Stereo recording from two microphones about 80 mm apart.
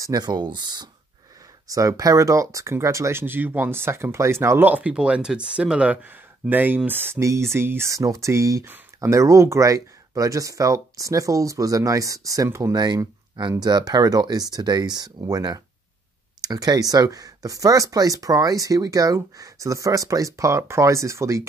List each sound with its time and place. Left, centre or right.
0.0 s speech: right
1.7 s speech: right
4.6 s speech: centre
7.2 s speech: right
7.9 s speech: right
8.6 s speech: right
9.1 s speech: right
12.7 s speech: right